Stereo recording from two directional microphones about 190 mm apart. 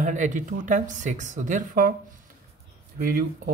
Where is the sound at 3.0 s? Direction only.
50° right (ahead or behind).